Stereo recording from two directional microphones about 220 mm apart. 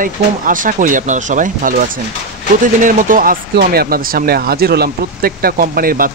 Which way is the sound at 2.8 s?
40° right (ahead or behind).